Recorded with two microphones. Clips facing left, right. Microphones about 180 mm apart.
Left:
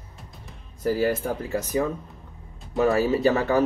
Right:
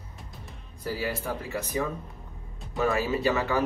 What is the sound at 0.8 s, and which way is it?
Speech, 45° left (ahead or behind).